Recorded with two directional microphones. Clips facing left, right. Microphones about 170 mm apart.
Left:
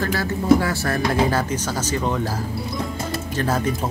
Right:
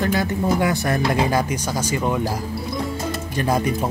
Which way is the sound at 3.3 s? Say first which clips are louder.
Right 2 dB; 15° right (ahead or behind).